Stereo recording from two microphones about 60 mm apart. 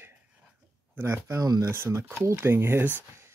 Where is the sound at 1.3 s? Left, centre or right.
Right.